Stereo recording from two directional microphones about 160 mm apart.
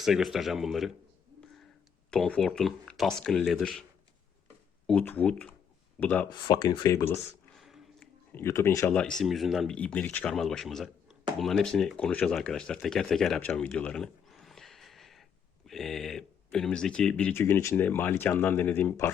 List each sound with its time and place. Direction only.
0.0 s speech: centre (ahead or behind)
2.0 s speech: 5° left (ahead or behind)
4.9 s speech: 10° left (ahead or behind)
6.3 s speech: 25° left (ahead or behind)
7.5 s a sound: centre (ahead or behind)
8.3 s speech: 15° left (ahead or behind)
8.9 s speech: 5° left (ahead or behind)